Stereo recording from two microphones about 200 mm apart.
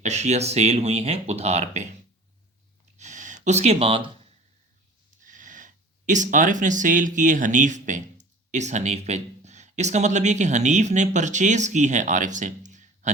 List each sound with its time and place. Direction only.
0.0 s speech: 35° right (ahead or behind)
3.0 s gasp: 40° right (ahead or behind)
5.2 s speech: 40° right (ahead or behind)